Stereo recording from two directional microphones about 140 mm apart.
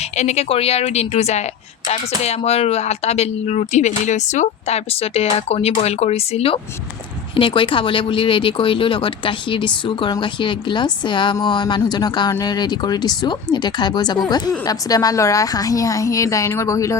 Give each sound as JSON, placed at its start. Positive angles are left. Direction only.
{"t": 0.2, "sound": "a woman's voice", "side_deg": 50}